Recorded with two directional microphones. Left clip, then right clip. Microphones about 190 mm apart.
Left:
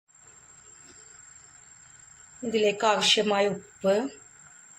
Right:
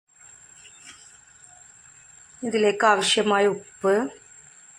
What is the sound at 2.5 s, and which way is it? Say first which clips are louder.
Speech: right 3 dB; 10° right (ahead or behind).